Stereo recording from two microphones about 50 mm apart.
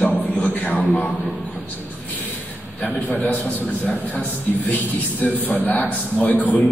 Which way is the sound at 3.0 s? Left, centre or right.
Left.